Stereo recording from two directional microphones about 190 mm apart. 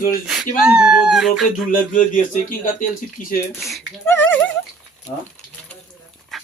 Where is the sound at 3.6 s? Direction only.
Centre (ahead or behind).